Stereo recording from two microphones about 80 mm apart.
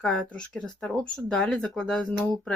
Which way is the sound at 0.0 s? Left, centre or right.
Centre.